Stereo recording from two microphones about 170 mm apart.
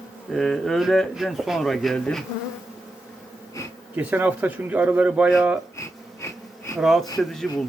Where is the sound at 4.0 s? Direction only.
10° right (ahead or behind).